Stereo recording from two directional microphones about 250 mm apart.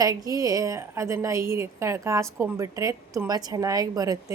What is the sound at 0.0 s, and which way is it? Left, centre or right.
A woman's voice, centre.